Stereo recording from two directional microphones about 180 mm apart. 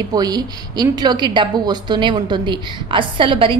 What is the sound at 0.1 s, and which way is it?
A woman's voice, 20° right (ahead or behind).